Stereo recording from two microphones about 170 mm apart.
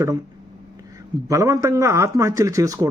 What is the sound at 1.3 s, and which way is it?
Speech, 20° right (ahead or behind).